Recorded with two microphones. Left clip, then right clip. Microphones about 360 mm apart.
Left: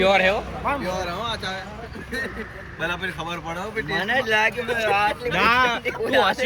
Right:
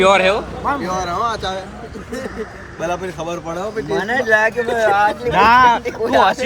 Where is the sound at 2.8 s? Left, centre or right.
Centre.